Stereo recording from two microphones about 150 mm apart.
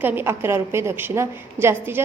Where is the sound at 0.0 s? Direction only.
15° right (ahead or behind).